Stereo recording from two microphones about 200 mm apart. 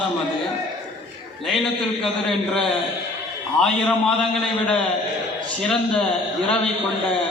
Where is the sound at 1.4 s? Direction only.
Centre (ahead or behind).